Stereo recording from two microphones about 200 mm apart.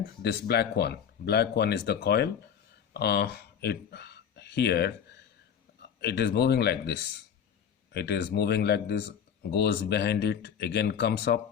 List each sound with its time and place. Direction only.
0.2 s speech: 55° left (ahead or behind)
6.0 s speech: 55° left (ahead or behind)